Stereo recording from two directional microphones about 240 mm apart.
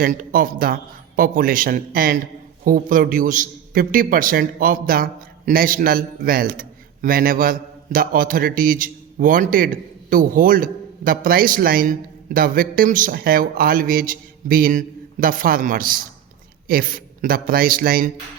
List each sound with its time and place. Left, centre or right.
0.0 s a man's voice: right